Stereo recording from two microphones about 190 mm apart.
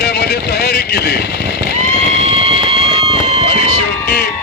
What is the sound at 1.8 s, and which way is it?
Run, 30° right (ahead or behind).